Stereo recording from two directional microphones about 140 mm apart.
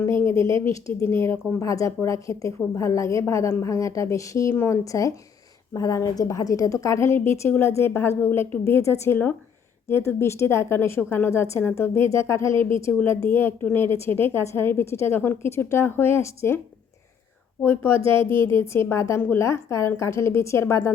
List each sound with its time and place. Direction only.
0.0 s a woman's voice: 20° left (ahead or behind)
17.6 s a woman's voice: 15° left (ahead or behind)